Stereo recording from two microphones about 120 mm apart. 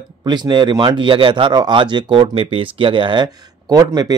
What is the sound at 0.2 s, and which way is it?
Speech, 40° right (ahead or behind).